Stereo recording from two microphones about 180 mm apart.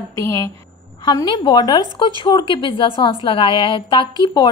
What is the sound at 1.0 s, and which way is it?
A woman's voice, 25° left (ahead or behind).